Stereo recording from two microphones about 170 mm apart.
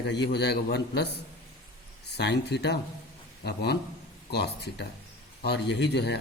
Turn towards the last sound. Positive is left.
turn(degrees=85)